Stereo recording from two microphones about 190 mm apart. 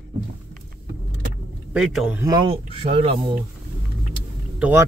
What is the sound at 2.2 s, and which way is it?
Speech, 25° right (ahead or behind).